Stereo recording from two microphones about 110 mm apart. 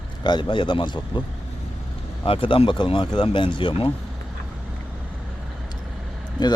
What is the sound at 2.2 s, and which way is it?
Speech, 55° left (ahead or behind).